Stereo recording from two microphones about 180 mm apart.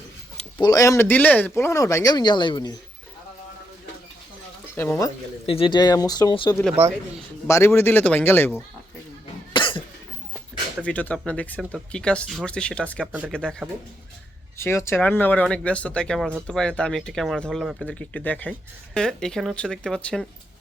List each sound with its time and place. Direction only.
0.6 s speech: 20° left (ahead or behind)
4.7 s speech: 15° left (ahead or behind)
5.5 s speech: 30° left (ahead or behind); by 8.6 s 10° left (ahead or behind)
9.5 s cough: 25° left (ahead or behind)
10.8 s speech: 10° left (ahead or behind)
13.1 s speech: 10° right (ahead or behind)
13.3 s speech: 5° left (ahead or behind)